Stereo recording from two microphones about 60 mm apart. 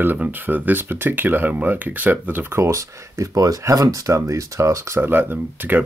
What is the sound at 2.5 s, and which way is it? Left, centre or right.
Speech, right.